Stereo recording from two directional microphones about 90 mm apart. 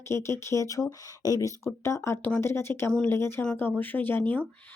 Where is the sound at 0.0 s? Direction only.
30° left (ahead or behind).